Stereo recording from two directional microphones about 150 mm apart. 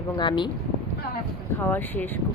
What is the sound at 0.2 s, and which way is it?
Speech, 30° left (ahead or behind).